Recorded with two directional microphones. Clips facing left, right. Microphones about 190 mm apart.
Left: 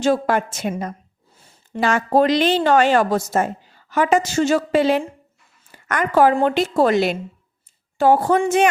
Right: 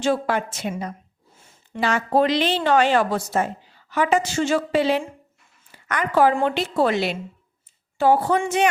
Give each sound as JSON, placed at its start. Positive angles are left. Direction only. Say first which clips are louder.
{"t": 0.0, "sound": "a woman's voice", "louder": "left 3 dB", "side_deg": 45}